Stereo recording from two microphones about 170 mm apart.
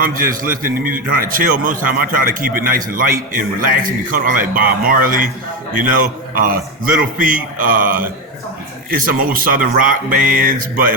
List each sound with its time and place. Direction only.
0.0 s a man's voice: 55° right (ahead or behind)